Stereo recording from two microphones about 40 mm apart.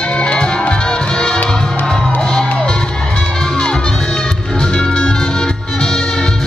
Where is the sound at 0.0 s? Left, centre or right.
Left.